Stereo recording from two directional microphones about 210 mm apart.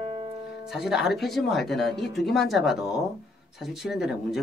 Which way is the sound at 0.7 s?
Centre (ahead or behind).